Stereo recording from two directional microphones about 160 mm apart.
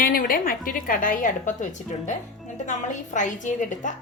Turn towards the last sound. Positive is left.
turn(degrees=50)  # may be behind; listen again after turning